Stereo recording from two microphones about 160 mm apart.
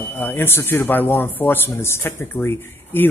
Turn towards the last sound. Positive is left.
turn(degrees=15)  # may be behind; listen again after turning